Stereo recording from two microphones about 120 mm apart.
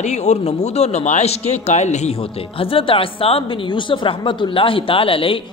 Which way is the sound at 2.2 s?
50° left (ahead or behind).